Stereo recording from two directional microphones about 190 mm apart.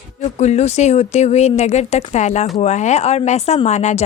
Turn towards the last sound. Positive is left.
turn(degrees=40)  # may be behind; listen again after turning